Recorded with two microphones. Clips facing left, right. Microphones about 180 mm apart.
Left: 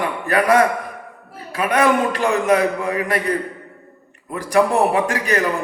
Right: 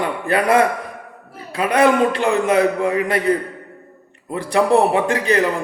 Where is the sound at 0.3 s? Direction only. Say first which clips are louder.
Even; 30° right (ahead or behind).